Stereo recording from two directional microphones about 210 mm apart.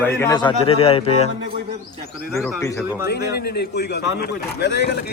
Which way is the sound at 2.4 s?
15° left (ahead or behind).